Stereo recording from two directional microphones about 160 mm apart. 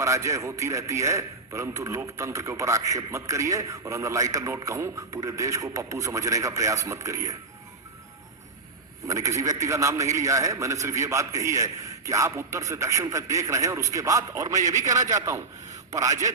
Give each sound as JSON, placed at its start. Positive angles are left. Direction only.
{"t": 0.0, "sound": "a man's voice", "side_deg": -20}
{"t": 9.0, "sound": "a man's voice", "side_deg": -20}